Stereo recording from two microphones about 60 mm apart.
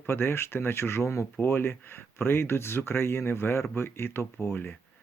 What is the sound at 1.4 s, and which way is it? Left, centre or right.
Speech, left.